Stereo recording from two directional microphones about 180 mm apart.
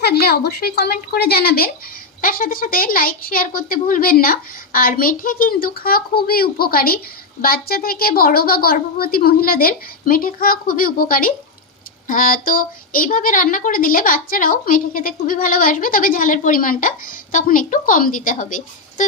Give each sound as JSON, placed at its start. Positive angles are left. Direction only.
{"t": 0.0, "sound": "a woman's voice", "side_deg": 60}